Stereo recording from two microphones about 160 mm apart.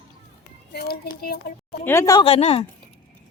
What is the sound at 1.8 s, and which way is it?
Speech, 15° left (ahead or behind).